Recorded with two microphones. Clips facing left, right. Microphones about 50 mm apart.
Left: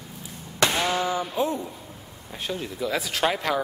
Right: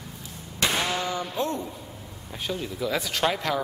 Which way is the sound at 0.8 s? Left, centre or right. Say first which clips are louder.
Left 3 dB; centre.